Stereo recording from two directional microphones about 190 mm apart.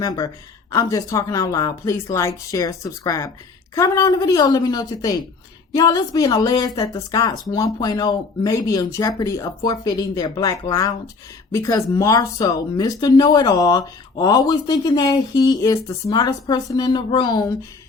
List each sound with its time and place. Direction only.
0.7 s speech: 20° left (ahead or behind)